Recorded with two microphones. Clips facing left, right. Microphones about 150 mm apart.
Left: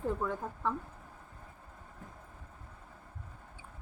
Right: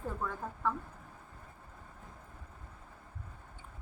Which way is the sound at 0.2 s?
15° left (ahead or behind).